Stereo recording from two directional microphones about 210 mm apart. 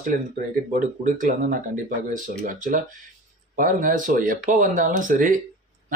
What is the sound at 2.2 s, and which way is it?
Speech, 40° right (ahead or behind).